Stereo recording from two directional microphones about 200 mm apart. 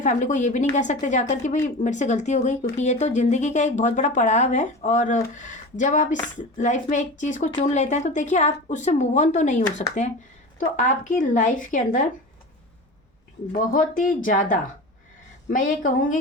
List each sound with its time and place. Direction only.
0.0 s speech: 40° left (ahead or behind)
11.2 s speech: 40° left (ahead or behind)
13.5 s speech: 45° left (ahead or behind)